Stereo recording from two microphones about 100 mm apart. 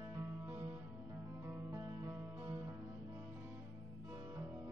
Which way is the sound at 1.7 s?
30° right (ahead or behind).